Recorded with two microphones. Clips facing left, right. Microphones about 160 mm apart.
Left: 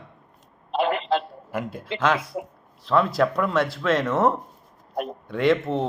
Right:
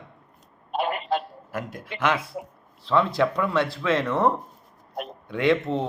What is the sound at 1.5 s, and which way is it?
Speech, 10° left (ahead or behind).